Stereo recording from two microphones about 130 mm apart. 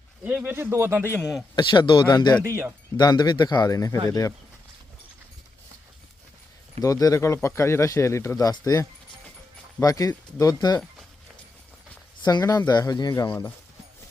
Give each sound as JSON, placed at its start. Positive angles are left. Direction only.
{"t": 0.3, "sound": "speech", "side_deg": -15}
{"t": 1.2, "sound": "a man's voice", "side_deg": 0}
{"t": 1.5, "sound": "speech", "side_deg": 35}
{"t": 2.4, "sound": "speech", "side_deg": -20}
{"t": 3.0, "sound": "speech", "side_deg": 30}
{"t": 6.8, "sound": "speech", "side_deg": 25}
{"t": 12.2, "sound": "speech", "side_deg": 30}